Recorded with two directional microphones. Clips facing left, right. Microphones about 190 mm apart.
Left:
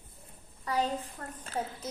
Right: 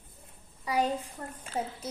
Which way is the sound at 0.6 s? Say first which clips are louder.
Right 2 dB; 10° right (ahead or behind).